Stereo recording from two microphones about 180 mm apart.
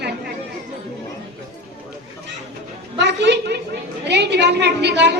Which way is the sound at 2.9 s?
75° right (ahead or behind).